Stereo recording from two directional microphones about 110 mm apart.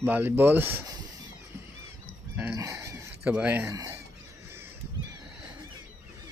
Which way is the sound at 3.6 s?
25° right (ahead or behind).